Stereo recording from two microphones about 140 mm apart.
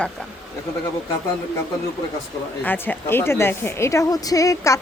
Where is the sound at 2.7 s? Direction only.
15° left (ahead or behind).